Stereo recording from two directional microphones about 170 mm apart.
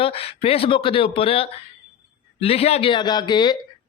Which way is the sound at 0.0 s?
35° left (ahead or behind).